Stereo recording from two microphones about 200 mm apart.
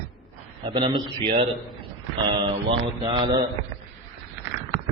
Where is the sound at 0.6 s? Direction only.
25° right (ahead or behind).